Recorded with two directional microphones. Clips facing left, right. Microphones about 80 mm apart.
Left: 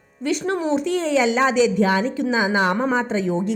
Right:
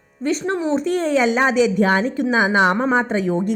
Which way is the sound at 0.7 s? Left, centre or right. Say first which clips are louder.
Right 2 dB; right.